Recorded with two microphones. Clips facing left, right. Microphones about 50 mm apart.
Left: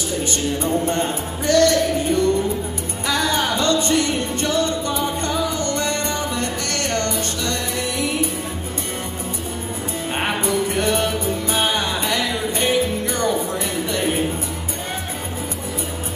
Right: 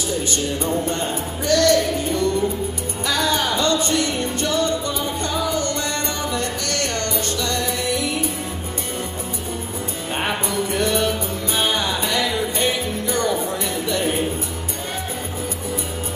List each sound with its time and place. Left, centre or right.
0.6 s speech: left
3.1 s music: left
10.1 s music: left